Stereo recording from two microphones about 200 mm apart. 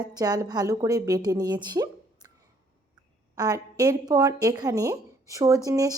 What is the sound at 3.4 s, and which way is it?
A woman's voice, 20° right (ahead or behind).